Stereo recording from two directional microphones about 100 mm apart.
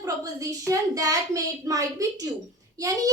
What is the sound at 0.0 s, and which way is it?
A child's voice, 35° right (ahead or behind).